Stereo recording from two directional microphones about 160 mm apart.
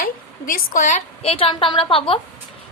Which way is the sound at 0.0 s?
60° left (ahead or behind).